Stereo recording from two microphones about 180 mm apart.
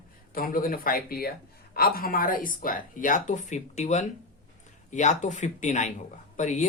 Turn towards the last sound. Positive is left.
turn(degrees=40)  # may be behind; listen again after turning